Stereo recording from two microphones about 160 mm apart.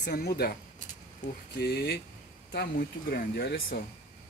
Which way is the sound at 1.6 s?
80° left.